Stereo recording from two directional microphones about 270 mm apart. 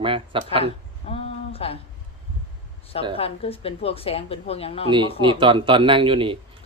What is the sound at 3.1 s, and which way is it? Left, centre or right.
A woman's voice, left.